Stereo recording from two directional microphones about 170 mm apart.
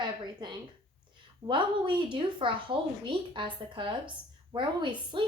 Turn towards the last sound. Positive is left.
turn(degrees=-30)  # may be behind; listen again after turning